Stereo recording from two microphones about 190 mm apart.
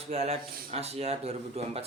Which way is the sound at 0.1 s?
30° right (ahead or behind).